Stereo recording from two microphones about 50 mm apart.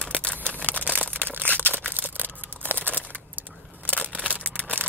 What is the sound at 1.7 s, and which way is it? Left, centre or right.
Single-lens reflex camera, left.